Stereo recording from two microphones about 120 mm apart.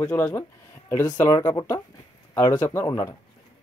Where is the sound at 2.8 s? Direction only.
30° left (ahead or behind).